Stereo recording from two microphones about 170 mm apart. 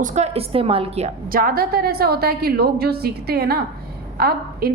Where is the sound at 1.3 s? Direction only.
60° right (ahead or behind).